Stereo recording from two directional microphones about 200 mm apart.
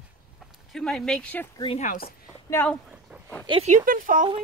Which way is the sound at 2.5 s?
10° left (ahead or behind).